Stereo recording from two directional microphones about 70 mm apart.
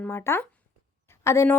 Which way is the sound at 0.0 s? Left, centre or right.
Left.